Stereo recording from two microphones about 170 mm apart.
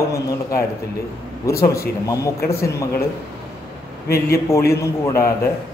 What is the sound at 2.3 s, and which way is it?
Speech, 65° left (ahead or behind).